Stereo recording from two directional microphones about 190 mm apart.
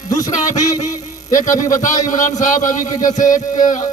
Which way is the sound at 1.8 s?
45° left (ahead or behind).